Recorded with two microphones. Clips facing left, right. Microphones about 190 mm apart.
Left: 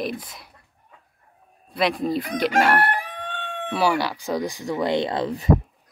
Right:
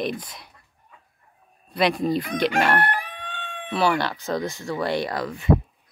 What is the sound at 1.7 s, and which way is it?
Speech, centre (ahead or behind).